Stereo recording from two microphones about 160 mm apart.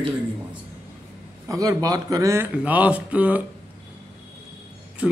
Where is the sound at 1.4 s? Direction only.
20° right (ahead or behind).